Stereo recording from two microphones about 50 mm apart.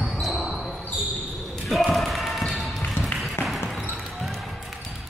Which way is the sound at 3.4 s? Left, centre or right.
Left.